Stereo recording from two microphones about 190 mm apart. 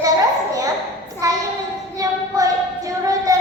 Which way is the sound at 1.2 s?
20° right (ahead or behind).